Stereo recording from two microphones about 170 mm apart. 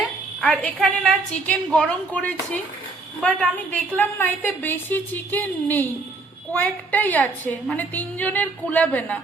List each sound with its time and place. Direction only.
0.4 s a woman's voice: 10° left (ahead or behind)